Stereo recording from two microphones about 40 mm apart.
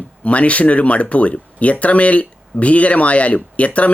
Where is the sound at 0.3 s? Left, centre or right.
Left.